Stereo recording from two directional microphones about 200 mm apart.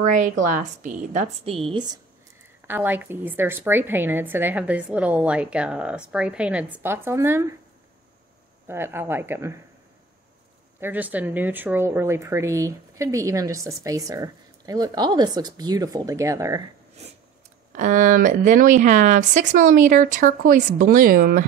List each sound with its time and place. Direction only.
0.0 s a woman's voice: 40° right (ahead or behind)
1.7 s speech: 20° right (ahead or behind)
2.6 s a woman's voice: 10° right (ahead or behind)
8.6 s a woman's voice: 10° right (ahead or behind)
10.8 s a woman's voice: 10° right (ahead or behind)
17.7 s a woman's voice: 40° right (ahead or behind)